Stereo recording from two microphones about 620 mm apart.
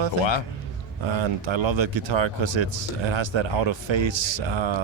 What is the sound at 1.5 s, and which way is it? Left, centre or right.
Speech, right.